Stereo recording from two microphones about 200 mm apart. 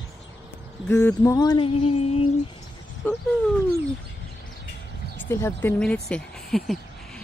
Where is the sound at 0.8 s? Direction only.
10° left (ahead or behind); by 2.2 s 30° left (ahead or behind).